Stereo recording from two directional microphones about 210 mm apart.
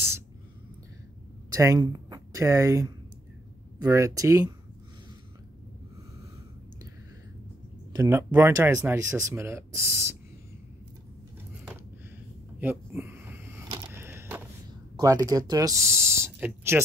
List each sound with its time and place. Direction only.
1.5 s speech: 15° right (ahead or behind)
7.9 s speech: 15° right (ahead or behind)
12.5 s a sound: 10° right (ahead or behind)
13.9 s creak: 10° right (ahead or behind)
15.0 s speech: 15° right (ahead or behind)